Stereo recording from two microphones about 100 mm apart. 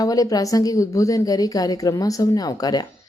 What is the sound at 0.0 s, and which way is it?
Speech, 35° left (ahead or behind).